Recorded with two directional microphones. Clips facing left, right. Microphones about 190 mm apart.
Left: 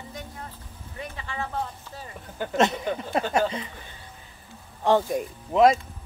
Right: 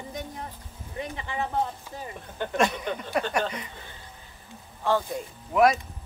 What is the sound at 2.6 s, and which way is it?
Speech, 25° left (ahead or behind).